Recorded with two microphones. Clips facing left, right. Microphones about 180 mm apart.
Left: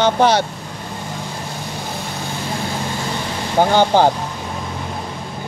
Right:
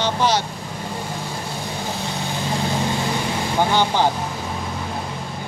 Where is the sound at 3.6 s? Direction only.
45° left (ahead or behind).